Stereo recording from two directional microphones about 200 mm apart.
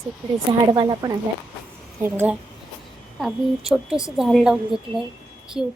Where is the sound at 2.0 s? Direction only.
10° right (ahead or behind).